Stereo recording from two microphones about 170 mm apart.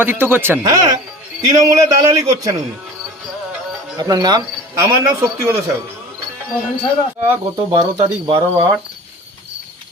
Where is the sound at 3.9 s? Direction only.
25° right (ahead or behind).